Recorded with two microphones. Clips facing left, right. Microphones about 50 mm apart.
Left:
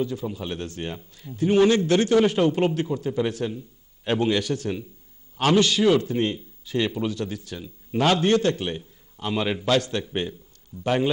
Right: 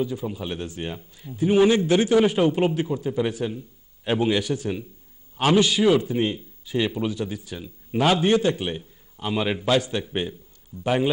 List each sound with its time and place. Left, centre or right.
0.0 s a man's voice: centre